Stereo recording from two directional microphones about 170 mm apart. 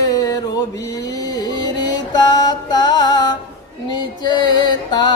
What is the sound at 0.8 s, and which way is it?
Mantra, 20° left (ahead or behind).